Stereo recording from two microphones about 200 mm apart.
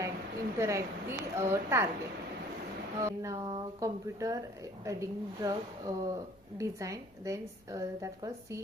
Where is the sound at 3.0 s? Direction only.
15° right (ahead or behind).